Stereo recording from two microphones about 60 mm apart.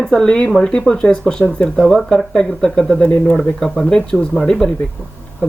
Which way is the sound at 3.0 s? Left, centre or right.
Left.